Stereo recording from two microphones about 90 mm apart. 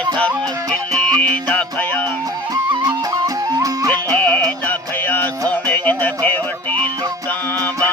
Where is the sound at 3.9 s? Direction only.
15° left (ahead or behind).